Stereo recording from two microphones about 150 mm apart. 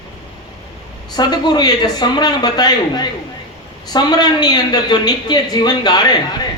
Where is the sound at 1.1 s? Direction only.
25° left (ahead or behind).